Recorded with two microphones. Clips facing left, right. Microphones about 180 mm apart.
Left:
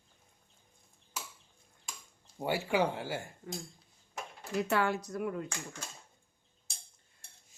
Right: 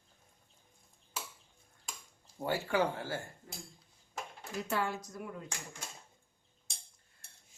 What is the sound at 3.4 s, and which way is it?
Speech, 65° left (ahead or behind).